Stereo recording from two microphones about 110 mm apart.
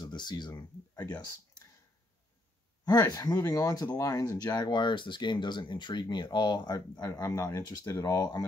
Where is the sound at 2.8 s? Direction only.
35° left (ahead or behind).